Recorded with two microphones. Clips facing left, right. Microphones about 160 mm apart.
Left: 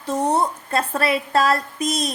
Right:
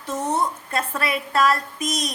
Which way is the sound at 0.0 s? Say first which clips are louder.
Left 4 dB; 35° left (ahead or behind).